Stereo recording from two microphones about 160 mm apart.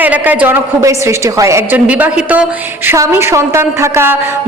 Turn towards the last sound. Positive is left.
turn(degrees=-15)  # may be behind; listen again after turning